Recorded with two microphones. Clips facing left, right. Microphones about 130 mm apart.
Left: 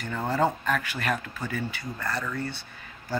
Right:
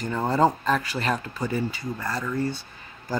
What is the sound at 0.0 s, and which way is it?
Speech, 35° right (ahead or behind).